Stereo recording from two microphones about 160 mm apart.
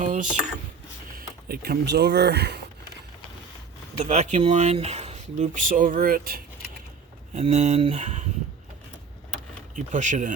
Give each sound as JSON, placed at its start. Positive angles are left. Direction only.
{"t": 0.0, "sound": "a sound", "side_deg": -50}
{"t": 1.1, "sound": "speech", "side_deg": -75}
{"t": 4.0, "sound": "speech", "side_deg": -45}
{"t": 7.3, "sound": "speech", "side_deg": -45}
{"t": 9.7, "sound": "speech", "side_deg": -50}